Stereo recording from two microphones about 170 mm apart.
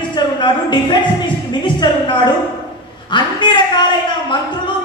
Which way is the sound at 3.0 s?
25° left (ahead or behind).